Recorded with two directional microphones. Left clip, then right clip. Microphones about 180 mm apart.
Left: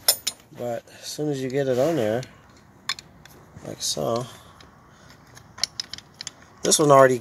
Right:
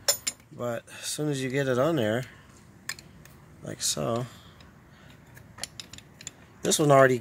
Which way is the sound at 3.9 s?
25° right (ahead or behind).